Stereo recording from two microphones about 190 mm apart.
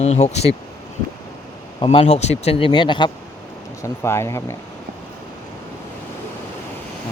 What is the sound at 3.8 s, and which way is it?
Speech, 15° left (ahead or behind).